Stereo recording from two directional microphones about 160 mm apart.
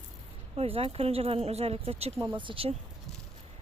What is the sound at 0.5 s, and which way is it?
Speech, 35° right (ahead or behind).